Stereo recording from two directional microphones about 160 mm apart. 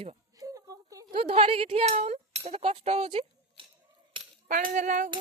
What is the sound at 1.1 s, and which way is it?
Speech, 40° right (ahead or behind).